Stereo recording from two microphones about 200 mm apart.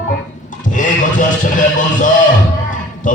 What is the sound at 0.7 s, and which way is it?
Music, 40° left (ahead or behind).